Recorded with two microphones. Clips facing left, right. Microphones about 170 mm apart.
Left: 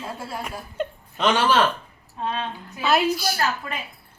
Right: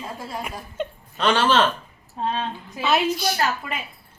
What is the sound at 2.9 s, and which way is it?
Speech, 5° left (ahead or behind).